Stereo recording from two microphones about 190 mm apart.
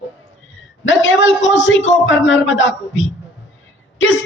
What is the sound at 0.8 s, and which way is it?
A man's voice, 80° left.